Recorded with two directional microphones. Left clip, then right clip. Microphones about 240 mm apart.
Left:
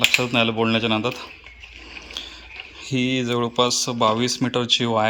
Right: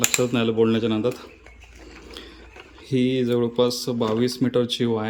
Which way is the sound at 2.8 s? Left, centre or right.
Centre.